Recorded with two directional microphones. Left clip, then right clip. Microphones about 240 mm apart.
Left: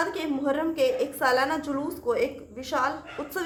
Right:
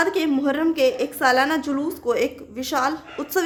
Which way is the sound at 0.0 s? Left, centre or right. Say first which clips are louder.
Right 7 dB; right.